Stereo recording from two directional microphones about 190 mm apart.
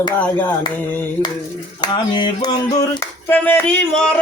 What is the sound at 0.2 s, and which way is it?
Music, 10° left (ahead or behind).